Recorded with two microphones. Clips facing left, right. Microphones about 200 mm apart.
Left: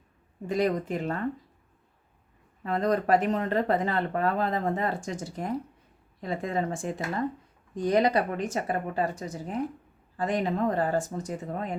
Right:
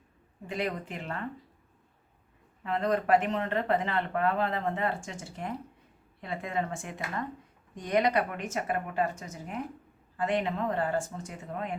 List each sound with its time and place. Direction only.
0.4 s speech: 40° left (ahead or behind)
2.6 s speech: 40° left (ahead or behind)